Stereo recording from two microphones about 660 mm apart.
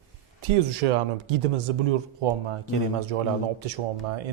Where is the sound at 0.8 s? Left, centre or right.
Right.